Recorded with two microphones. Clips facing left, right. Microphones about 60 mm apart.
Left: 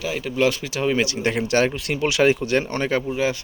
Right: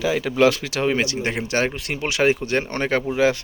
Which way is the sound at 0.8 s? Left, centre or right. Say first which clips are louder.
Left 1 dB; right.